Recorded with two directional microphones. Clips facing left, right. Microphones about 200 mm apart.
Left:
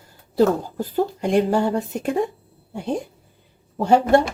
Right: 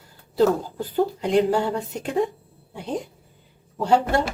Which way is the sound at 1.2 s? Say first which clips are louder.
Left 2 dB; 45° left (ahead or behind).